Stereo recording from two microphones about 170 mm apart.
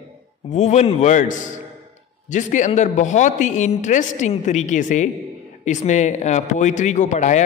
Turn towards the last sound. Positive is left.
turn(degrees=45)  # may be behind; listen again after turning